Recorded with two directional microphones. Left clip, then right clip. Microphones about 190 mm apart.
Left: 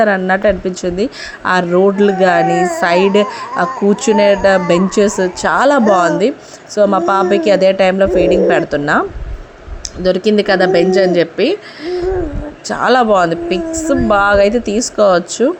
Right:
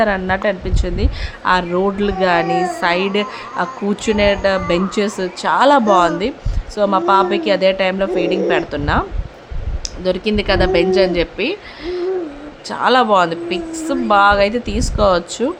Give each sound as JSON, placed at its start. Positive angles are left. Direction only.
{"t": 0.0, "sound": "a woman's voice", "side_deg": 20}